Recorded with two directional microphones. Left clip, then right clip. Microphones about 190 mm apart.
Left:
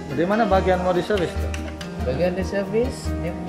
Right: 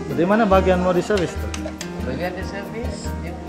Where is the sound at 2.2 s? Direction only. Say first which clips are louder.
Left 6 dB; 35° left (ahead or behind).